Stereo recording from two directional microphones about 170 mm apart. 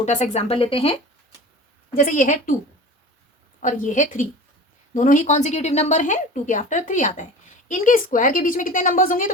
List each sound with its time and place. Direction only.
0.0 s speech: 45° left (ahead or behind)
1.9 s a woman's voice: 55° left (ahead or behind)
3.6 s a woman's voice: 50° left (ahead or behind)